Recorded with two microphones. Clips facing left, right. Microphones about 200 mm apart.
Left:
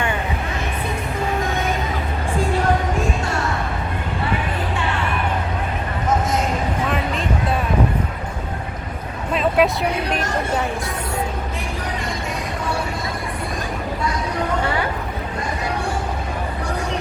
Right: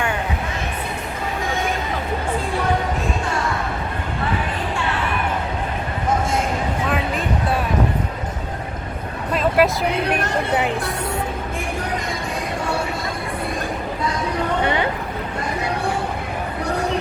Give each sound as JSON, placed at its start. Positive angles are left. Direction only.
{"t": 9.3, "sound": "vehicle", "side_deg": 0}
{"t": 10.2, "sound": "speech", "side_deg": -60}